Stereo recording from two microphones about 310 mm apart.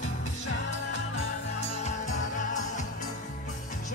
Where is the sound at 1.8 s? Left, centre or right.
Left.